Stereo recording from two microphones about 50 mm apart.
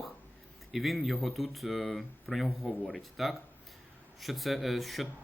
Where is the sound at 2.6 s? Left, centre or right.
Left.